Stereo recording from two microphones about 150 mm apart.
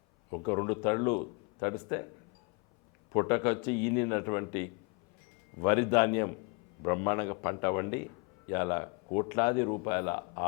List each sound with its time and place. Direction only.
0.3 s speech: 25° left (ahead or behind)
3.1 s a man's voice: 20° left (ahead or behind)